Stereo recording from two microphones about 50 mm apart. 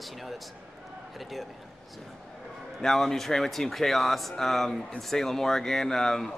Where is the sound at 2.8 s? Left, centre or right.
Centre.